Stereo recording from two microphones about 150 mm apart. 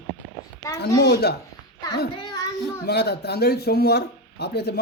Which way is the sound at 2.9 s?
90° left.